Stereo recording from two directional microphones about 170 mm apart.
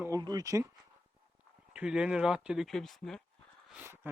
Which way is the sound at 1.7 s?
5° right (ahead or behind).